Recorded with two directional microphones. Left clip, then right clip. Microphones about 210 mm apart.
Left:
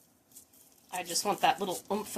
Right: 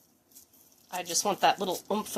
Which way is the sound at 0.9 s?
40° right (ahead or behind).